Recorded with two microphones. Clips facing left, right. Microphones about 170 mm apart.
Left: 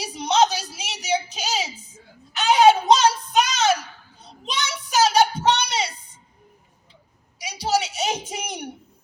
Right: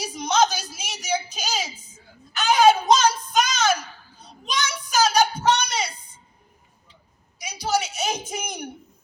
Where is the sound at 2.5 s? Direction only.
30° left (ahead or behind).